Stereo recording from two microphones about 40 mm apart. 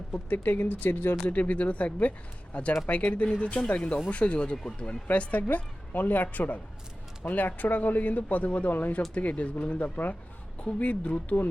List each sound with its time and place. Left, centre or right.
0.3 s speech: left
1.3 s speech: left
3.8 s speech: left
5.4 s speech: left